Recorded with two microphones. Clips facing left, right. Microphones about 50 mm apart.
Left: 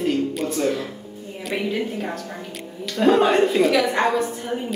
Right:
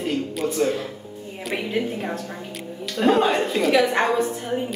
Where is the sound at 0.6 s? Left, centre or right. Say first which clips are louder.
Even; centre.